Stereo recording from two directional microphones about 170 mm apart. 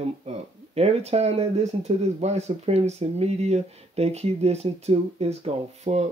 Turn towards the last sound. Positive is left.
turn(degrees=-40)  # may be behind; listen again after turning